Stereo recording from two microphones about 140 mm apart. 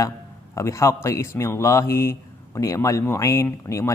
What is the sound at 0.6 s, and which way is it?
A man's voice, 20° left (ahead or behind).